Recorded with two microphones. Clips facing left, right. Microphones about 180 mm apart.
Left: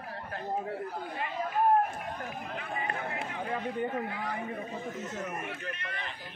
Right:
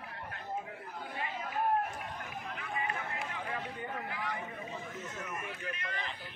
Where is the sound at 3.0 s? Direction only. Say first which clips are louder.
Left 4 dB; 30° left (ahead or behind).